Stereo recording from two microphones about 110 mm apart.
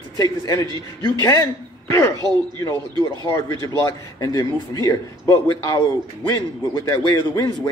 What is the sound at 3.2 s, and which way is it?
A man's voice, 25° left (ahead or behind).